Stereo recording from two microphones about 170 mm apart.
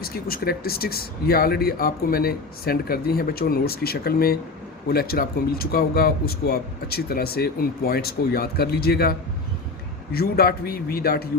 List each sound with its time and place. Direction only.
0.0 s speech: 60° left (ahead or behind)